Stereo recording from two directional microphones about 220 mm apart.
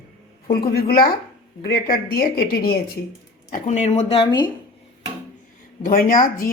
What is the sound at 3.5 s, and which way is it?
Speech, 30° left (ahead or behind).